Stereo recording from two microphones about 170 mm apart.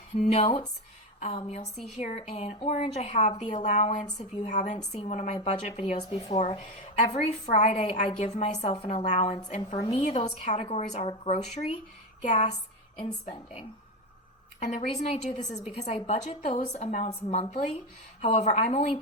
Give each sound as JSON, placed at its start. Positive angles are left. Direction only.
{"t": 0.2, "sound": "a woman's voice", "side_deg": 35}